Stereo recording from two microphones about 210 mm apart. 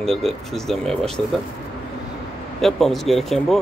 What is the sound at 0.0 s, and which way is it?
Speech, centre (ahead or behind).